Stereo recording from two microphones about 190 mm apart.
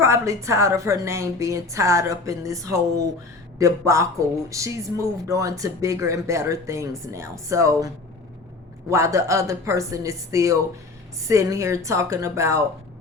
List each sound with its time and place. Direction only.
0.0 s speech: 15° right (ahead or behind)
8.9 s speech: 15° right (ahead or behind)